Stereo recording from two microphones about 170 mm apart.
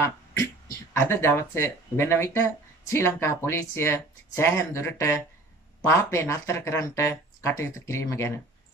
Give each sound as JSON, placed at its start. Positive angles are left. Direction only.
{"t": 0.0, "sound": "speech", "side_deg": 15}